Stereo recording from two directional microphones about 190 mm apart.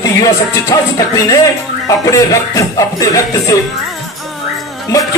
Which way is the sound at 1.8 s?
15° left (ahead or behind).